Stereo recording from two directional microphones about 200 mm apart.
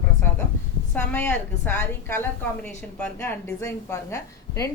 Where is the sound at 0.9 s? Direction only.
10° left (ahead or behind).